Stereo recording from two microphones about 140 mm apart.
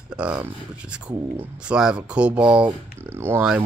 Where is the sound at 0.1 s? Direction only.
5° right (ahead or behind).